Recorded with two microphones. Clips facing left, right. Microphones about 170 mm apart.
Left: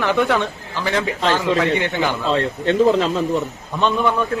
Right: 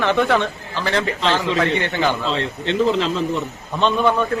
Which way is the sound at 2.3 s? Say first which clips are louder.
Left 3 dB; 50° left (ahead or behind).